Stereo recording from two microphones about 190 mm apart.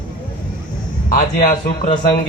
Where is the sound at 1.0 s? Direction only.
45° left (ahead or behind).